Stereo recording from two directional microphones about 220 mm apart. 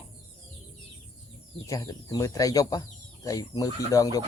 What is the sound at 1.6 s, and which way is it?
Speech, 15° left (ahead or behind).